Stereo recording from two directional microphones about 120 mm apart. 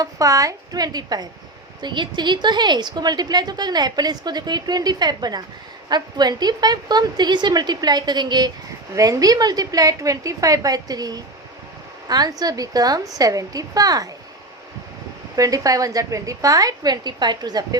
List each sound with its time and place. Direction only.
0.0 s a woman's voice: 30° right (ahead or behind)
15.4 s a woman's voice: 30° right (ahead or behind)